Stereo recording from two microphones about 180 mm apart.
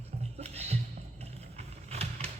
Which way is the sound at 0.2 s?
35° right (ahead or behind).